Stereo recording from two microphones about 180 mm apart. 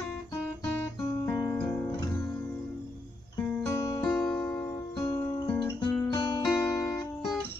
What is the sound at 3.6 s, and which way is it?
Music, 15° left (ahead or behind).